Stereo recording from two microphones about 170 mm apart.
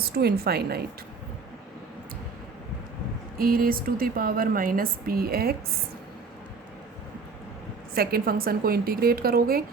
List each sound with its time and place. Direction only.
0.0 s a woman's voice: 65° right (ahead or behind)
3.3 s a woman's voice: 60° right (ahead or behind)
7.9 s a woman's voice: 60° right (ahead or behind)